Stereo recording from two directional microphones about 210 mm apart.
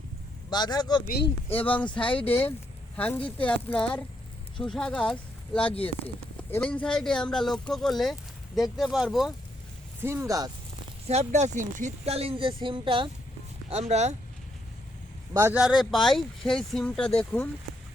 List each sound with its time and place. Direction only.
0.5 s speech: 20° left (ahead or behind)
1.0 s speech: 45° left (ahead or behind)
1.5 s speech: 10° left (ahead or behind)
1.9 s speech: 25° left (ahead or behind)
2.3 s speech: 10° left (ahead or behind)
5.6 s speech: 25° left (ahead or behind)
6.5 s speech: 5° left (ahead or behind)
10.0 s speech: 10° right (ahead or behind)
11.0 s speech: 30° right (ahead or behind)
15.3 s speech: 10° right (ahead or behind); by 17.5 s 5° left (ahead or behind)